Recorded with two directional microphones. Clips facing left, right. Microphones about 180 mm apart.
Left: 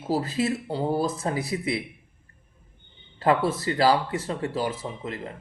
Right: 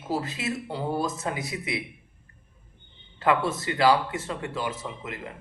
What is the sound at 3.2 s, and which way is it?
Speech, 35° left (ahead or behind).